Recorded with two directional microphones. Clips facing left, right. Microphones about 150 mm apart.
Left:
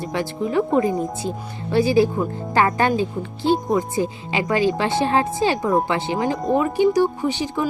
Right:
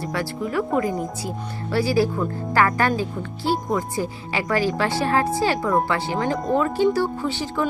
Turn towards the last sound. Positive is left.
turn(degrees=15)  # may be behind; listen again after turning